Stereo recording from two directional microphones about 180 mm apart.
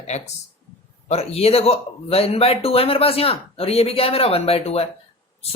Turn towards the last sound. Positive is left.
turn(degrees=35)  # may be behind; listen again after turning